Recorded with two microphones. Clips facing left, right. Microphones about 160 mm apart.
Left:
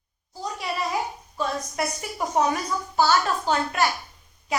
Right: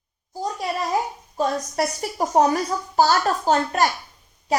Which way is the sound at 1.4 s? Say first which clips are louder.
Right 5 dB; 40° right (ahead or behind).